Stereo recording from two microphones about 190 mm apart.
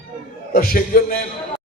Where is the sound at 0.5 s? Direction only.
50° left (ahead or behind).